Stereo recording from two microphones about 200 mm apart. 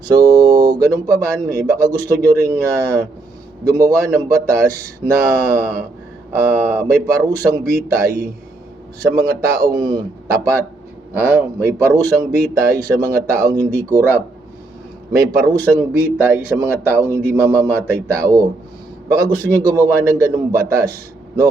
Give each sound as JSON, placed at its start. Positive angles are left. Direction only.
{"t": 0.0, "sound": "speech", "side_deg": -20}
{"t": 15.3, "sound": "speech", "side_deg": -15}